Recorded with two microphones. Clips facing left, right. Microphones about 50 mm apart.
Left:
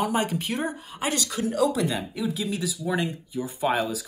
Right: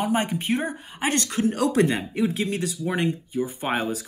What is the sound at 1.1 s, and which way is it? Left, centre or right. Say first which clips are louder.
Speech: right 5 dB; right.